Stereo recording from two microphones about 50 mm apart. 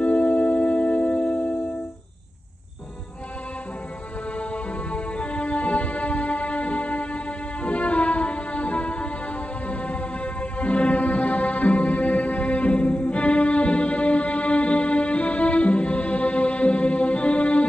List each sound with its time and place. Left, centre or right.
0.0 s music: left
4.9 s music: left